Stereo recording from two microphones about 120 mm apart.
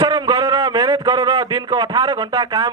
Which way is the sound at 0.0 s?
30° right (ahead or behind).